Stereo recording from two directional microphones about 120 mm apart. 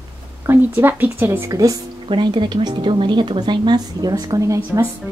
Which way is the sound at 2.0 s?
40° right (ahead or behind).